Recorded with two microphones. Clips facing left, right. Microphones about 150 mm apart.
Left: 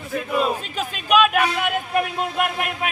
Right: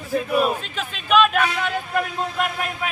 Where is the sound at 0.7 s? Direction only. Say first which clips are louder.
Left 1 dB; 10° left (ahead or behind).